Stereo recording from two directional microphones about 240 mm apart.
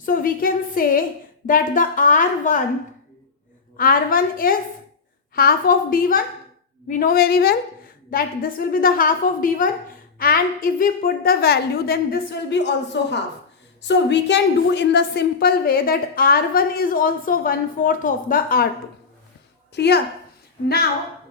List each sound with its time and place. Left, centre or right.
0.0 s a woman's voice: left
3.8 s a woman's voice: left
19.7 s a woman's voice: left